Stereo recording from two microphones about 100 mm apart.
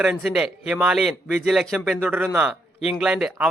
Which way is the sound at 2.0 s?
20° right (ahead or behind).